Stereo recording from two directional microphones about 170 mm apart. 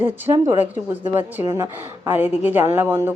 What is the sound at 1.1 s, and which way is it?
Speech, 15° right (ahead or behind).